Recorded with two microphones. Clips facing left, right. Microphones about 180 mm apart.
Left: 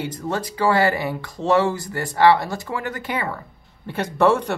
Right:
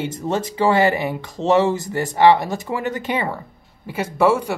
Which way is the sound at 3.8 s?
5° right (ahead or behind).